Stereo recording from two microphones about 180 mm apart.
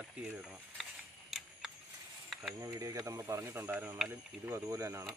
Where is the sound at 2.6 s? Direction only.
15° right (ahead or behind).